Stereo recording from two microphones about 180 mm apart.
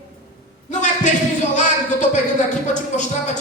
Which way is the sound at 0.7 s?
40° left (ahead or behind).